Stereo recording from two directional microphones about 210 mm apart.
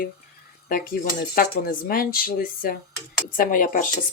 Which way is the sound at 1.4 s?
45° left (ahead or behind).